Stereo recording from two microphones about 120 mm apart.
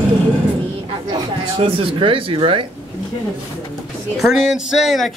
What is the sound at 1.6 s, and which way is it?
Speech, 50° right (ahead or behind).